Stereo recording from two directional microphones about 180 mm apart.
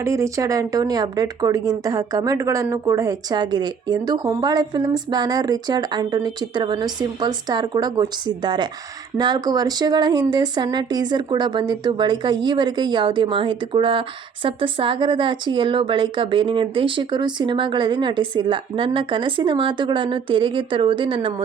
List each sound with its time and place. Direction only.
0.0 s speech: 15° right (ahead or behind)